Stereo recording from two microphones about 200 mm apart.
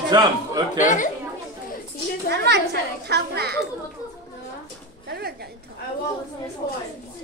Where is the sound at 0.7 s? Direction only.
40° left (ahead or behind).